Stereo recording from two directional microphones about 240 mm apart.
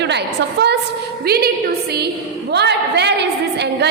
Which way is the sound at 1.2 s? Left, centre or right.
Right.